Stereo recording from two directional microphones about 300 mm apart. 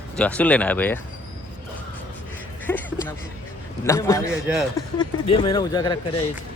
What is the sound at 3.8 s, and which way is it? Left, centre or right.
A man's voice, centre.